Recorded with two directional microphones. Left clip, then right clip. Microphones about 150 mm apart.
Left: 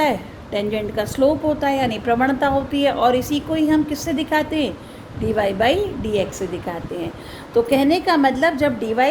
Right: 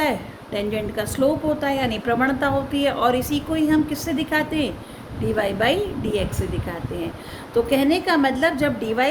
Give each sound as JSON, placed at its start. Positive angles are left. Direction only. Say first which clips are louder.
{"t": 0.0, "sound": "a woman's voice", "louder": "left 3 dB", "side_deg": 25}
{"t": 7.5, "sound": "a woman's voice", "louder": "left 3 dB", "side_deg": 25}